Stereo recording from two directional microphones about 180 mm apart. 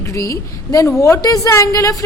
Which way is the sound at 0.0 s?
15° left (ahead or behind).